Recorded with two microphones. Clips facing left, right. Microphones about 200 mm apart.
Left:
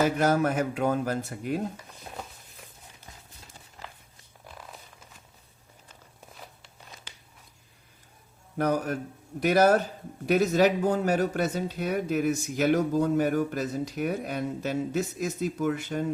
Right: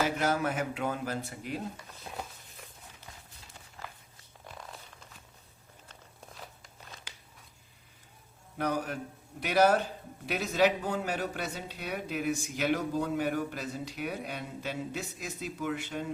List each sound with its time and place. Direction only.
0.2 s speech: 45° left (ahead or behind)
7.1 s biting: 10° right (ahead or behind)
8.5 s speech: 45° left (ahead or behind)